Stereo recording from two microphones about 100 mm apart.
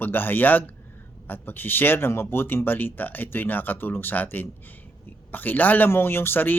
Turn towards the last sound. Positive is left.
turn(degrees=20)  # may be behind; listen again after turning